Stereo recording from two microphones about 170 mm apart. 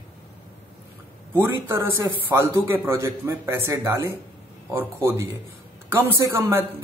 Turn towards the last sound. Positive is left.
turn(degrees=-15)  # may be behind; listen again after turning